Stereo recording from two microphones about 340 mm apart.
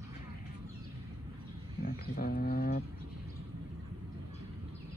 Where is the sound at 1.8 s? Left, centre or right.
Left.